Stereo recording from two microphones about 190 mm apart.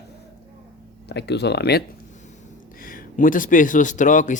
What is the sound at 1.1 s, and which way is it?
Speech, 60° left (ahead or behind).